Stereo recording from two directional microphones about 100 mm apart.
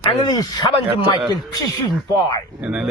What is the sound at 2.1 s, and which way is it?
Speech, 40° left (ahead or behind).